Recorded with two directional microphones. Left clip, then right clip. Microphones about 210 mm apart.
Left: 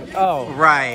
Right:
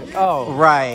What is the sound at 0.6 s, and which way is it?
Speech, 20° right (ahead or behind).